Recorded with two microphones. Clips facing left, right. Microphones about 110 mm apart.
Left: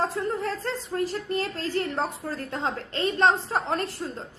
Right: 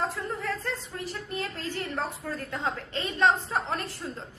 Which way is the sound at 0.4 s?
30° left (ahead or behind).